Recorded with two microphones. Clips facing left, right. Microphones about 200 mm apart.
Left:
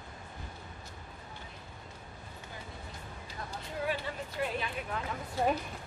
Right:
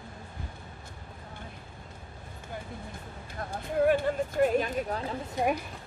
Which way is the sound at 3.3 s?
50° right (ahead or behind).